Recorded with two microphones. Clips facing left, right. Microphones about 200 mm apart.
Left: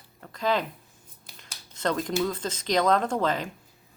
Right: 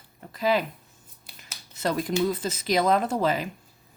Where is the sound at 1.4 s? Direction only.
5° right (ahead or behind).